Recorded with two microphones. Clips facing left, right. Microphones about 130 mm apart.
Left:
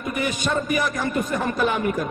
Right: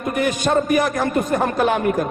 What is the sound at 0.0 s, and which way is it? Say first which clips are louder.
A man's voice: right 5 dB; 55° right (ahead or behind).